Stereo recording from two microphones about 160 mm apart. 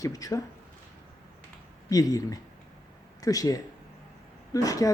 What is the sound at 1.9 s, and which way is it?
A woman's voice, 20° left (ahead or behind).